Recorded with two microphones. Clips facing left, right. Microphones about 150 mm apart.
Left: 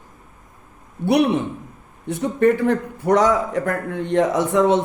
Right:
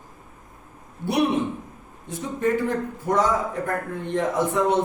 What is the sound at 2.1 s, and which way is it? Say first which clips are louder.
Speech: left 7 dB; 65° left (ahead or behind).